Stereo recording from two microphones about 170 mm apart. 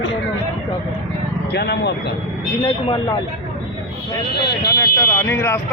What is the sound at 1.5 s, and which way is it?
Speech, 75° left (ahead or behind).